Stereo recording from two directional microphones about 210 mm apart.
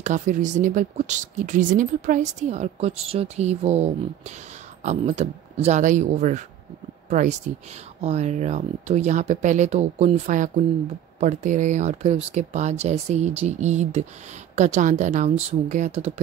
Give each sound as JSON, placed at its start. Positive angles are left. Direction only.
{"t": 0.0, "sound": "speech", "side_deg": -35}